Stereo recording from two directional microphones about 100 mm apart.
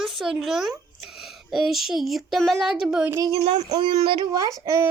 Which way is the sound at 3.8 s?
55° right (ahead or behind).